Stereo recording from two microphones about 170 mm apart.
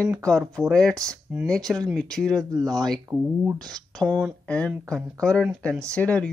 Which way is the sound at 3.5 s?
Centre (ahead or behind).